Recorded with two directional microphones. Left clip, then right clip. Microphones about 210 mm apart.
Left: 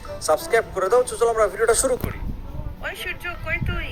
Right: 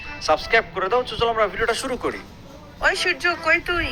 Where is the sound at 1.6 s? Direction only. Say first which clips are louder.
Left 3 dB; 15° left (ahead or behind).